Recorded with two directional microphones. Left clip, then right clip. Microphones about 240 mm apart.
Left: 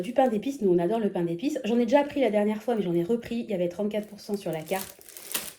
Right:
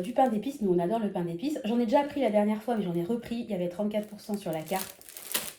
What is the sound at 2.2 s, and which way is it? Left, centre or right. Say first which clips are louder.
Speech: left 2 dB; left.